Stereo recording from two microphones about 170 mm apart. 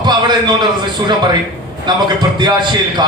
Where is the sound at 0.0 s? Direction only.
25° right (ahead or behind).